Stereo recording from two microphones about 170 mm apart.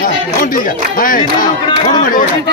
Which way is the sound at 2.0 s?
55° left (ahead or behind).